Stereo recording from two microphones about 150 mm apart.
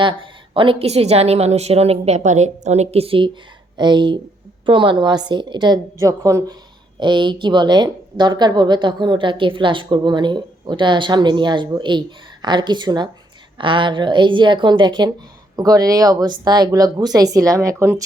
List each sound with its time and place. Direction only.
0.0 s a woman's voice: 35° right (ahead or behind)
7.0 s speech: 30° right (ahead or behind)